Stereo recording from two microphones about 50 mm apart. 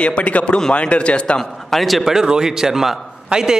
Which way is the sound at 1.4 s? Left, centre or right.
Centre.